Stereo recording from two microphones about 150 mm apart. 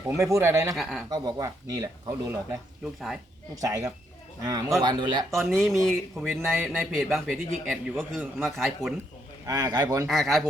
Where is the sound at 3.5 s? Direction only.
20° right (ahead or behind).